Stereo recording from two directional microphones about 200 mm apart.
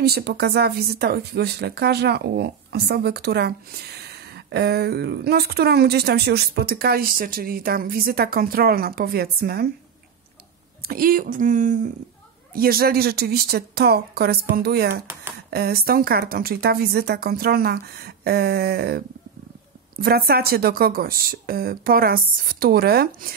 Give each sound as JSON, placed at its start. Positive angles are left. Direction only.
{"t": 0.0, "sound": "speech", "side_deg": -55}
{"t": 10.8, "sound": "a woman's voice", "side_deg": -45}
{"t": 12.5, "sound": "speech", "side_deg": -50}